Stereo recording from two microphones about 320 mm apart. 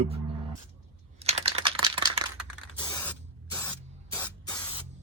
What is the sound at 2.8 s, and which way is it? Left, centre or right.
Spray, centre.